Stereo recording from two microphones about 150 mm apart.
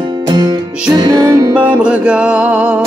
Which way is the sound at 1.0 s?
25° right (ahead or behind).